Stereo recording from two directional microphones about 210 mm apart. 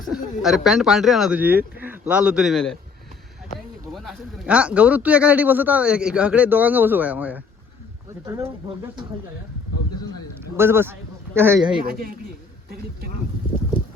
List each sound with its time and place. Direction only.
0.0 s speech: centre (ahead or behind)
3.9 s speech: 5° right (ahead or behind)
10.4 s speech: 10° right (ahead or behind)
11.9 s speech: 45° right (ahead or behind)